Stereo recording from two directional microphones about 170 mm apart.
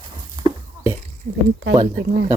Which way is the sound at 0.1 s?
25° right (ahead or behind).